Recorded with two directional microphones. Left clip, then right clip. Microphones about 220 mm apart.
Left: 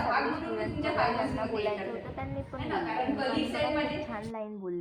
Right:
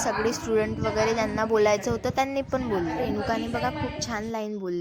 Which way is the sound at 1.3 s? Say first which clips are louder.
Right 10 dB; 50° right (ahead or behind).